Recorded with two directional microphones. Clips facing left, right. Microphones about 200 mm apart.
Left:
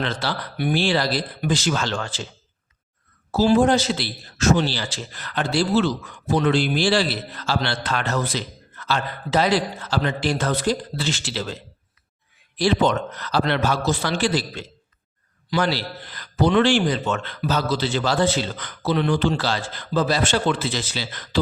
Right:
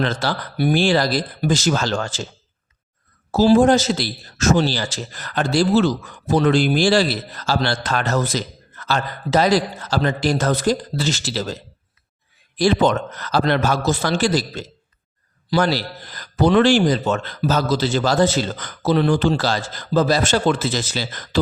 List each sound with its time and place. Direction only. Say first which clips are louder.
0.0 s a man's voice: right 4 dB; 45° right (ahead or behind)
3.3 s a man's voice: right 4 dB; 40° right (ahead or behind)
12.5 s a man's voice: right 3 dB; 45° right (ahead or behind)